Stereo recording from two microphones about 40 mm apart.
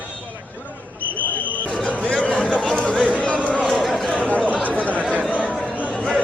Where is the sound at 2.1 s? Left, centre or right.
Left.